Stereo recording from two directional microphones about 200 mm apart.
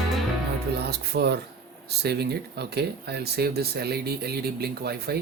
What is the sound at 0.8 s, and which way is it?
Speech, 55° right (ahead or behind).